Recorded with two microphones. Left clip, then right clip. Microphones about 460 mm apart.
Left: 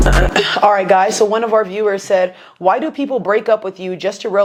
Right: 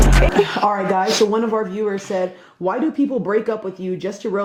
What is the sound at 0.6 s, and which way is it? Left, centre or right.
Speech, left.